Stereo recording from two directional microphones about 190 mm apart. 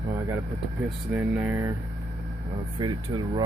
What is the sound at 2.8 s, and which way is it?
Speech, 20° right (ahead or behind).